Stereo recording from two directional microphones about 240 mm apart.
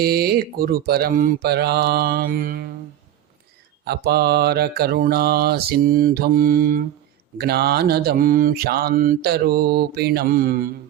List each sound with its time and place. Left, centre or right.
0.0 s mantra: right
3.8 s mantra: right